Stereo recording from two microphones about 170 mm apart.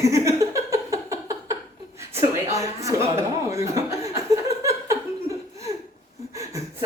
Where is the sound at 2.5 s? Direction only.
20° right (ahead or behind).